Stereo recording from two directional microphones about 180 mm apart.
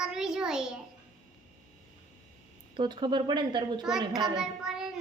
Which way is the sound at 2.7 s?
25° right (ahead or behind).